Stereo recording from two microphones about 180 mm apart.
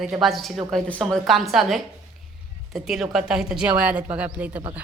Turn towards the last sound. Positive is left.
turn(degrees=-5)  # may be behind; listen again after turning